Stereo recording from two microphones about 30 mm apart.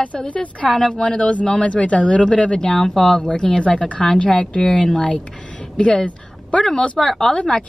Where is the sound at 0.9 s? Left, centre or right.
Left.